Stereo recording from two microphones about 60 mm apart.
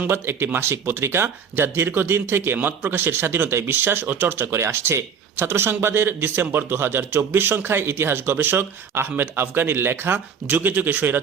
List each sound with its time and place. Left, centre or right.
0.1 s speech: right